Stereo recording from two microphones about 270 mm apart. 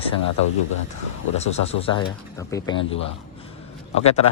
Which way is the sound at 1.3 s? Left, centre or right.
Left.